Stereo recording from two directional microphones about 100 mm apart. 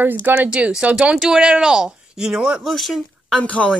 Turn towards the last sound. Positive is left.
turn(degrees=10)  # may be behind; listen again after turning